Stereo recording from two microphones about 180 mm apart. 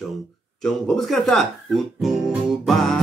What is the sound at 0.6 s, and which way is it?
Speech, 5° left (ahead or behind).